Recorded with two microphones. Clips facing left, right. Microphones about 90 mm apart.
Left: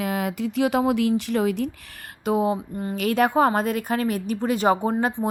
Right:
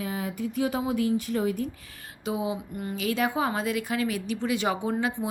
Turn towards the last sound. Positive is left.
turn(degrees=45)  # may be behind; listen again after turning